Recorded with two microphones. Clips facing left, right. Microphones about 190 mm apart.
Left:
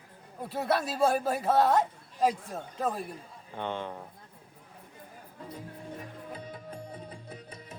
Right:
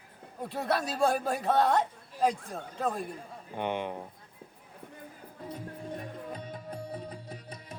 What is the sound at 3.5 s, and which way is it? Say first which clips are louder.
Speech: right 2 dB; 15° right (ahead or behind).